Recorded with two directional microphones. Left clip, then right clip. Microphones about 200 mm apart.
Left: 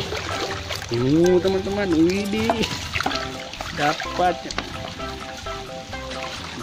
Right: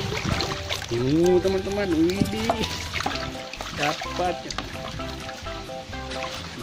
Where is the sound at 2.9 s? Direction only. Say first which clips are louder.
Left 4 dB; centre (ahead or behind).